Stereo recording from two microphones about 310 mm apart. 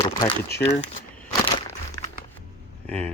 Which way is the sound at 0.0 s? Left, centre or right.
Centre.